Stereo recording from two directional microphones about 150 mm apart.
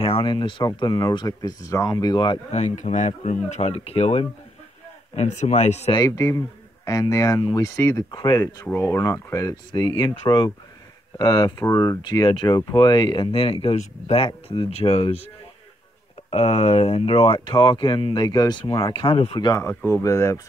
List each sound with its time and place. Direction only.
0.0 s speech: 35° left (ahead or behind)
2.5 s speech: 55° left (ahead or behind)
5.9 s speech: 25° left (ahead or behind); by 15.2 s 40° left (ahead or behind)
16.3 s speech: 45° left (ahead or behind)
19.5 s speech: 15° left (ahead or behind)